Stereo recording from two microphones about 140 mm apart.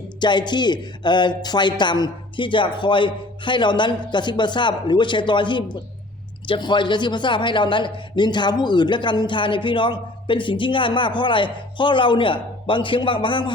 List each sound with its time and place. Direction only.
0.2 s a man's voice: 35° left (ahead or behind)